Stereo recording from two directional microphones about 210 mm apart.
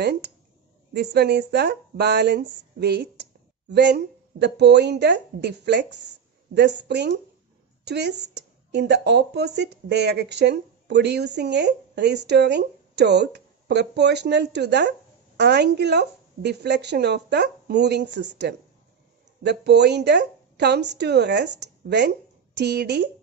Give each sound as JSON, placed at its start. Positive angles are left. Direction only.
{"t": 0.0, "sound": "a woman's voice", "side_deg": -55}